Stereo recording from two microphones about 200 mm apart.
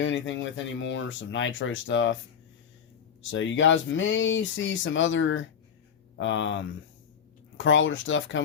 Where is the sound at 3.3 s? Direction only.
65° left (ahead or behind).